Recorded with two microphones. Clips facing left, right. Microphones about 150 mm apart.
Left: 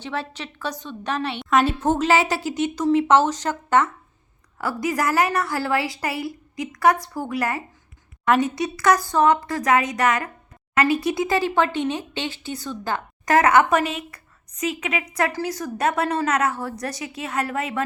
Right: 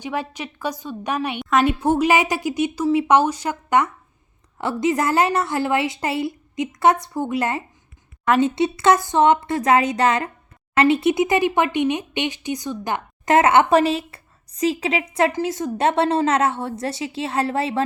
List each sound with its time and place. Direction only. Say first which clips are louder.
0.0 s a woman's voice: right 3 dB; 15° right (ahead or behind)
4.5 s speech: right 4 dB; 25° right (ahead or behind)